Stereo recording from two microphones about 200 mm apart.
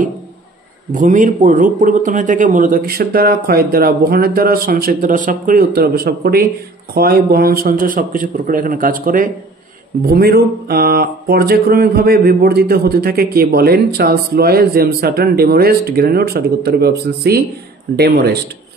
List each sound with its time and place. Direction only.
0.9 s speech: 40° right (ahead or behind)